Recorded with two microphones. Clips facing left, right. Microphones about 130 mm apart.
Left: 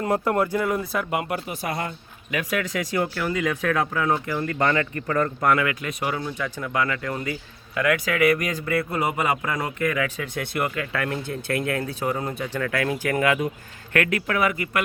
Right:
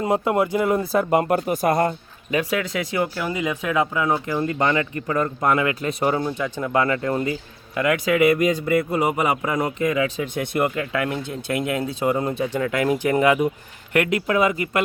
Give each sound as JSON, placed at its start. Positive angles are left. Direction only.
{"t": 0.0, "sound": "speech", "side_deg": -15}
{"t": 2.3, "sound": "speech", "side_deg": -30}